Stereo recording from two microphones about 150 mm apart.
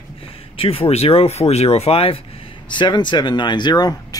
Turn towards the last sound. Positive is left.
turn(degrees=25)  # may be behind; listen again after turning